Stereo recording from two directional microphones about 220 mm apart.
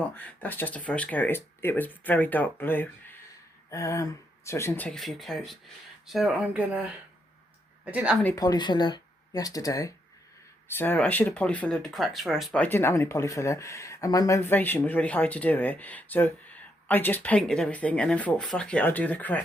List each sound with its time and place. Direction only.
0.1 s speech: 10° left (ahead or behind)
7.9 s speech: 5° right (ahead or behind)
8.2 s speech: 10° left (ahead or behind)